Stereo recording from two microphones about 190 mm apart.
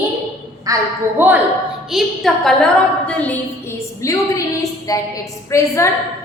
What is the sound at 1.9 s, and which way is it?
A woman's voice, centre (ahead or behind).